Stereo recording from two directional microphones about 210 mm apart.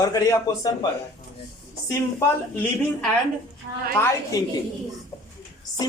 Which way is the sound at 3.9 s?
10° left (ahead or behind).